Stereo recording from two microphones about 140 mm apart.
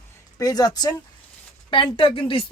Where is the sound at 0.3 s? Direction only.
25° left (ahead or behind).